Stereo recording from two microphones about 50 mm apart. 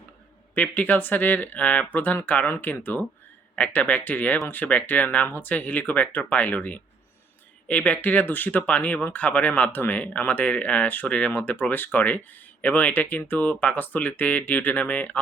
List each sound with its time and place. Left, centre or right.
0.5 s speech: left